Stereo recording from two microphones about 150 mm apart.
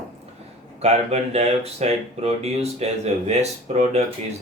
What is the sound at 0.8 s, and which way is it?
Speech, 45° right (ahead or behind).